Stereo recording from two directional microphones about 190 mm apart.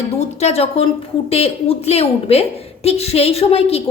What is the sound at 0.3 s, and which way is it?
A woman's voice, 35° left (ahead or behind).